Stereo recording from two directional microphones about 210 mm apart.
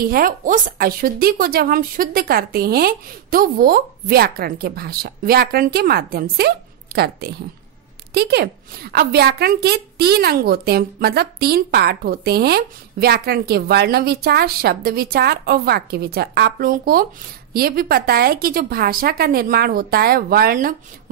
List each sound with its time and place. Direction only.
0.0 s a woman's voice: 40° right (ahead or behind)